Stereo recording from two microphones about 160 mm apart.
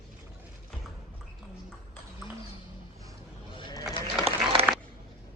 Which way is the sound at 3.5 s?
25° left (ahead or behind).